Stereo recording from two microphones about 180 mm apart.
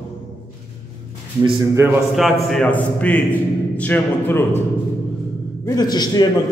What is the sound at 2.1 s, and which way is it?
A man's voice, centre (ahead or behind).